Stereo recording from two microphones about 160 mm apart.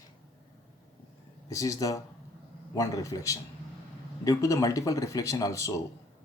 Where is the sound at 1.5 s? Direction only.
20° left (ahead or behind).